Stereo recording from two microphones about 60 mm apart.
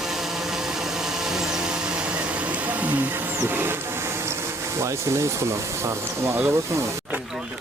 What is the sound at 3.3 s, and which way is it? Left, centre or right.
Speech, right.